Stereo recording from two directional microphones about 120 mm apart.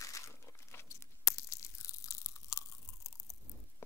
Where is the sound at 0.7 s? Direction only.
20° left (ahead or behind).